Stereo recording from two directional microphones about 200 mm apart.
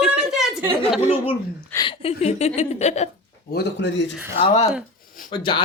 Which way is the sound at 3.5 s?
60° left (ahead or behind).